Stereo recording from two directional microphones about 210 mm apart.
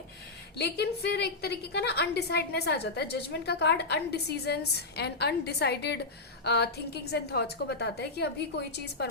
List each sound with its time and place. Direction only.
0.6 s a woman's voice: 50° left (ahead or behind)